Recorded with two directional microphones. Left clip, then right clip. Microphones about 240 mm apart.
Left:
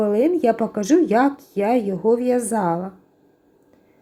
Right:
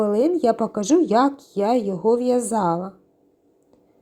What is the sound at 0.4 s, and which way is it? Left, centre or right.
Speech, centre.